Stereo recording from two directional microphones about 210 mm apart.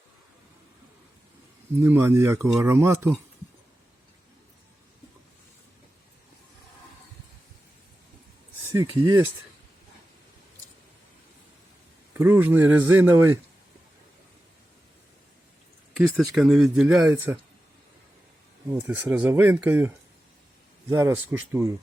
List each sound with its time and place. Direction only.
1.8 s speech: 10° right (ahead or behind)
8.6 s speech: 15° right (ahead or behind)
12.1 s speech: 10° right (ahead or behind)
16.1 s speech: centre (ahead or behind)
18.7 s speech: 10° right (ahead or behind)
20.9 s speech: 10° right (ahead or behind)